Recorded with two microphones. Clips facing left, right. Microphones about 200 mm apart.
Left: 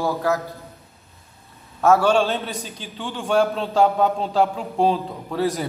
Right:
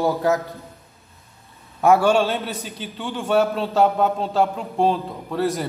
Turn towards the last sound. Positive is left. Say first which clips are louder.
# even
turn(degrees=0)  # may be behind; listen again after turning